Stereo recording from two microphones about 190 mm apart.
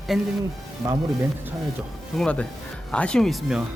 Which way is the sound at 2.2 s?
5° left (ahead or behind).